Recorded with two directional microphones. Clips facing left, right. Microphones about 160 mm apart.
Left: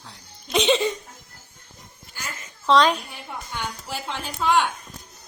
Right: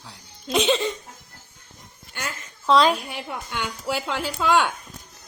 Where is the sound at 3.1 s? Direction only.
85° right.